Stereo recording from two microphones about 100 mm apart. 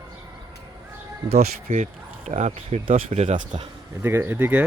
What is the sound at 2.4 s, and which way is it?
Speech, 90° right.